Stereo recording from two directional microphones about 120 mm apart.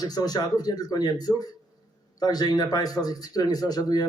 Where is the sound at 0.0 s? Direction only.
30° left (ahead or behind).